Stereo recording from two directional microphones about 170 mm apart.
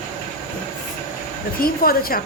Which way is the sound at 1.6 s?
60° left (ahead or behind).